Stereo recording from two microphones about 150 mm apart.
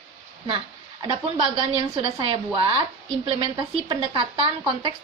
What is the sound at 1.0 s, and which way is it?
A woman's voice, 30° right (ahead or behind).